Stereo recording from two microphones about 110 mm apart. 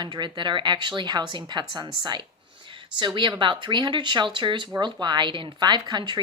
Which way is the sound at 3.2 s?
45° right (ahead or behind).